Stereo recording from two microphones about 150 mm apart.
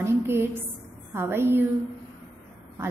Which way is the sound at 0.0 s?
15° right (ahead or behind).